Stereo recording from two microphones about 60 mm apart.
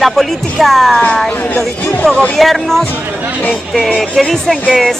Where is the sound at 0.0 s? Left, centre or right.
Centre.